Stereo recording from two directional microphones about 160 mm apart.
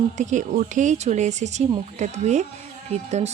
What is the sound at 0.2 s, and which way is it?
Speech, 50° right (ahead or behind).